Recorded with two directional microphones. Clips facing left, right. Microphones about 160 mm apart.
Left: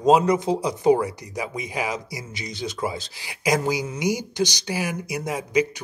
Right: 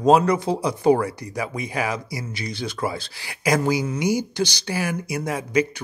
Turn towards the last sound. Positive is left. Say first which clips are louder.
# right 1 dB
turn(degrees=15)  # may be behind; listen again after turning